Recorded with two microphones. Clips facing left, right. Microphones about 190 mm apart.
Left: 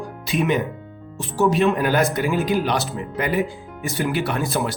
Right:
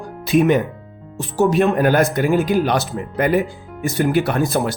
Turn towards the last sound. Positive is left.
turn(degrees=-45)  # may be behind; listen again after turning